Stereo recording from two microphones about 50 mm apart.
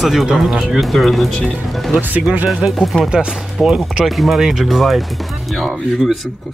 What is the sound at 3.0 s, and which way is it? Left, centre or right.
Speech, centre.